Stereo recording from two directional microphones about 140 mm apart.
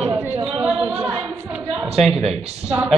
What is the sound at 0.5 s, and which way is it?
Speech, 10° right (ahead or behind).